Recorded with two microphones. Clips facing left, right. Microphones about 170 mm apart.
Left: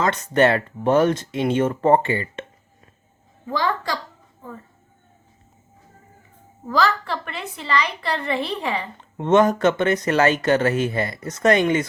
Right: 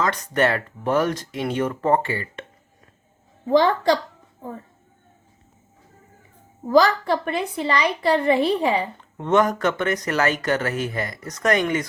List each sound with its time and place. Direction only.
0.0 s speech: 25° left (ahead or behind)
3.4 s a woman's voice: 25° right (ahead or behind)
6.7 s a woman's voice: 15° right (ahead or behind)
9.1 s speech: 25° left (ahead or behind)